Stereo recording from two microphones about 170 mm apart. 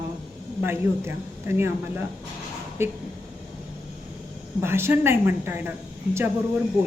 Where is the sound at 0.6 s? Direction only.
15° right (ahead or behind).